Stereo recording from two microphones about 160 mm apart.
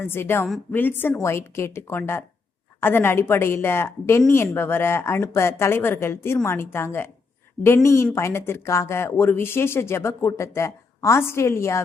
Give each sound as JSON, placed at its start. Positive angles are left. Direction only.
{"t": 0.0, "sound": "speech", "side_deg": 15}